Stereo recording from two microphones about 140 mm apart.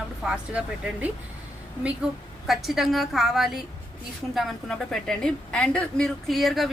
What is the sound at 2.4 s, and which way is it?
Speech, centre (ahead or behind).